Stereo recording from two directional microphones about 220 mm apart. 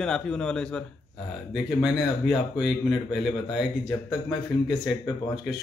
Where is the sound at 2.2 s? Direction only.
5° right (ahead or behind).